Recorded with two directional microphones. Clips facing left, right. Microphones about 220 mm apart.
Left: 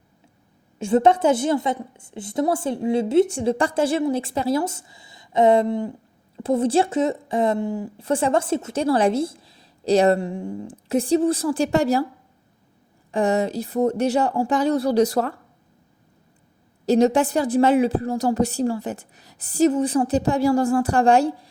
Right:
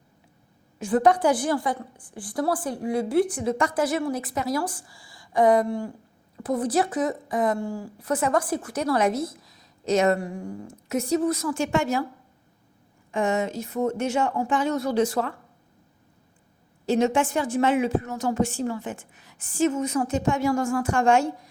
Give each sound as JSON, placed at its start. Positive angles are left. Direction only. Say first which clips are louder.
{"t": 0.8, "sound": "a woman's voice", "louder": "left 3 dB", "side_deg": 25}
{"t": 13.1, "sound": "a woman's voice", "louder": "left 4 dB", "side_deg": 35}
{"t": 16.8, "sound": "a woman's voice", "louder": "left 5 dB", "side_deg": 40}